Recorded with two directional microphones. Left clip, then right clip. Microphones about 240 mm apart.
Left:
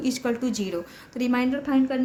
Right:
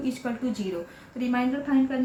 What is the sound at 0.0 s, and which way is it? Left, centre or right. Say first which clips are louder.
A woman's voice: left 4 dB; left.